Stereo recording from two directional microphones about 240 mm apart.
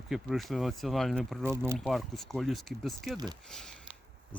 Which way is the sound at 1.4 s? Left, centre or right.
Centre.